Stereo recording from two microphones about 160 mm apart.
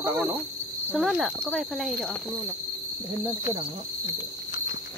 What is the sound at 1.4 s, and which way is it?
Speech, centre (ahead or behind).